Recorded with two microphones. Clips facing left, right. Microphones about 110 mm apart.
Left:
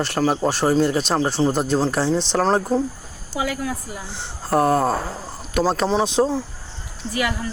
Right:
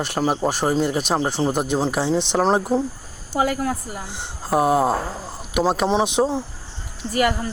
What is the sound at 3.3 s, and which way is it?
Speech, 45° right (ahead or behind).